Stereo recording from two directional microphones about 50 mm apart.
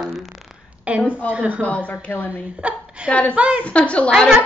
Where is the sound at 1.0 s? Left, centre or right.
Left.